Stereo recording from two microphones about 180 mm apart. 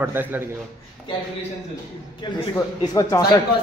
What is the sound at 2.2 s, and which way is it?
A man's voice, 20° left (ahead or behind).